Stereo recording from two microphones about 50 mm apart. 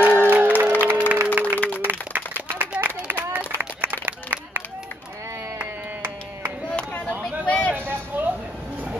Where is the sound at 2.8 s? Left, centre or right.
Right.